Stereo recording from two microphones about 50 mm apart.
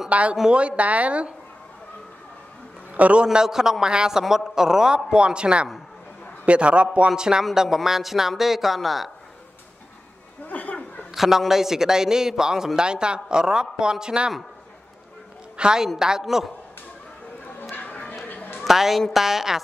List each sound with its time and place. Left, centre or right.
0.1 s speech: right
2.9 s a man's voice: right
3.3 s a man's voice: centre
10.4 s a sound: left
11.1 s a man's voice: centre
15.5 s a woman's voice: centre
17.7 s dog: left
18.6 s a man's voice: centre